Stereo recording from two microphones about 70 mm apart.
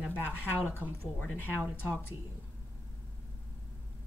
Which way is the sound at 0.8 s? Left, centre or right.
Right.